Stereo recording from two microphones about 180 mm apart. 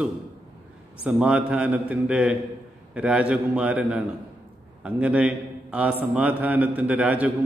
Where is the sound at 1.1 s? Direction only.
5° right (ahead or behind).